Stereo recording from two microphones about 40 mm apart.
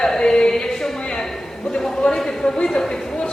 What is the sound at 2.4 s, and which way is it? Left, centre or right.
Speech, left.